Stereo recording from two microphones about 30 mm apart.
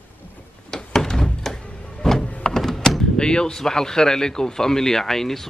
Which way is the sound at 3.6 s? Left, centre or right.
Centre.